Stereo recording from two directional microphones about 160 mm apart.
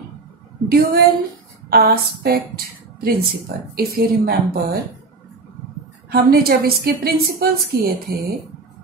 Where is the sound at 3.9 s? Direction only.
70° right (ahead or behind).